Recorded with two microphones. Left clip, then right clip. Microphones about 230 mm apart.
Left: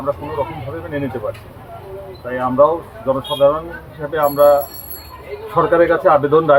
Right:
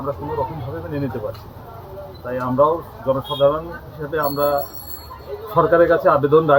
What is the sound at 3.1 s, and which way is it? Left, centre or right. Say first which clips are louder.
Speech: left 3 dB; centre.